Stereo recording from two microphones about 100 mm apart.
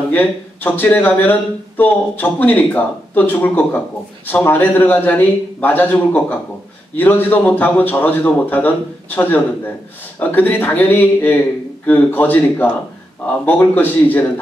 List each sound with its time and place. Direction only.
0.1 s a man's voice: 20° left (ahead or behind)